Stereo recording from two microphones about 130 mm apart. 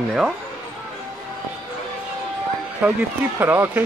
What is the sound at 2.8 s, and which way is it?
Speech, 10° right (ahead or behind).